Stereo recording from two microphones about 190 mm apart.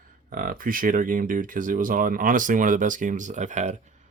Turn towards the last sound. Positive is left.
turn(degrees=-40)  # may be behind; listen again after turning